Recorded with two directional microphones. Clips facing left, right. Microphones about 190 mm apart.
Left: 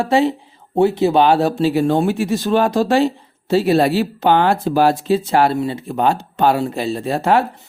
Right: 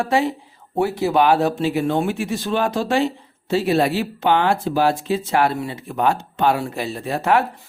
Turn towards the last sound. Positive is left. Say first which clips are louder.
# left 3 dB
turn(degrees=30)  # may be behind; listen again after turning